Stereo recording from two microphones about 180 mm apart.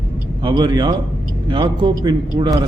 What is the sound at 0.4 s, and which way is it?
A man's voice, 25° right (ahead or behind).